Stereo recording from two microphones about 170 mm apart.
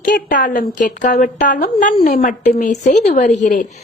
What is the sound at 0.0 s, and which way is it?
A woman's voice, 50° left (ahead or behind).